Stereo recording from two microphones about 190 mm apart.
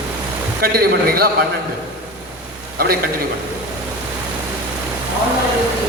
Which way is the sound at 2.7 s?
50° right (ahead or behind).